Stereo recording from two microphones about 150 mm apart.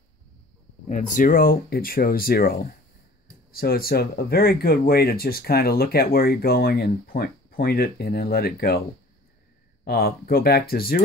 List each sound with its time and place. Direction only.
0.8 s speech: 55° left (ahead or behind); by 8.8 s 90° left
9.8 s speech: 90° left